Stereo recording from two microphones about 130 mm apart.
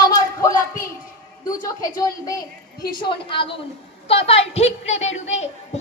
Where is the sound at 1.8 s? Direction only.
30° left (ahead or behind).